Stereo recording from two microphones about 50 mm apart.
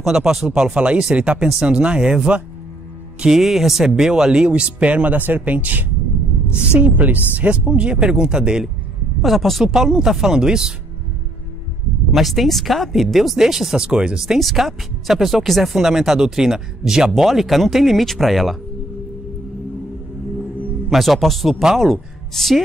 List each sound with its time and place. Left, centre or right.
0.0 s speech: centre
3.2 s speech: centre
9.2 s speech: centre
9.7 s speech: centre
12.1 s speech: centre
20.9 s a woman's voice: centre